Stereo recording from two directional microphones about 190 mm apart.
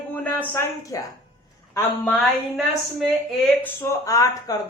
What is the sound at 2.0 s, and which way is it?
A woman's voice, 5° left (ahead or behind).